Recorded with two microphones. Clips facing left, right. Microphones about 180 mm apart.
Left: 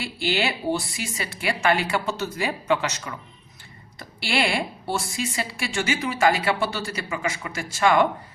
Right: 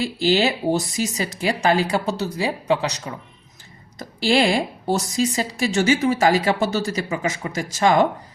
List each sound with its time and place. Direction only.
0.0 s a woman's voice: 40° right (ahead or behind)